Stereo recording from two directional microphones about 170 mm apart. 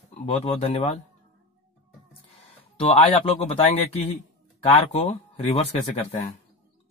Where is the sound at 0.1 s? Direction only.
35° left (ahead or behind).